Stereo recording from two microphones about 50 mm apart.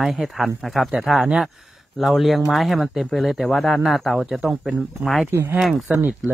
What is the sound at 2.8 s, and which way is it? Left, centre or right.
Speech, centre.